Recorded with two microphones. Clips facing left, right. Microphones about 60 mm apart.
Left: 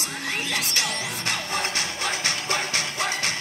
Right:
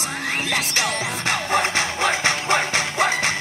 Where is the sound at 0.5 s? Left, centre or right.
Right.